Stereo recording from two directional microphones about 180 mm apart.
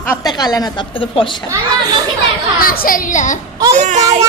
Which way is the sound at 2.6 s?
55° left (ahead or behind).